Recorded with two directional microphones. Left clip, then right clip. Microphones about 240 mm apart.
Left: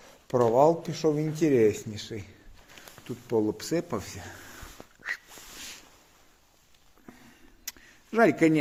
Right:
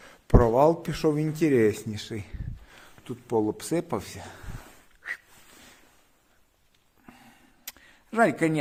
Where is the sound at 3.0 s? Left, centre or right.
Centre.